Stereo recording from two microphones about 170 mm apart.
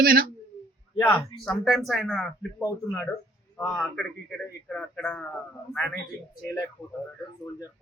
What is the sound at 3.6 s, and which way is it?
A man's voice, 5° left (ahead or behind).